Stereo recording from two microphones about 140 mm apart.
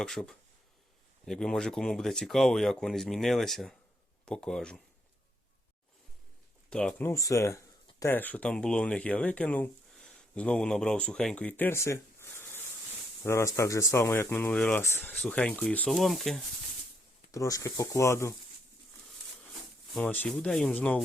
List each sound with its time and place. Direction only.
0.0 s speech: 5° left (ahead or behind)
6.7 s speech: 5° left (ahead or behind)
7.1 s speech: 20° left (ahead or behind)
15.9 s speech: centre (ahead or behind)
17.3 s speech: 25° left (ahead or behind)
19.9 s speech: 10° left (ahead or behind)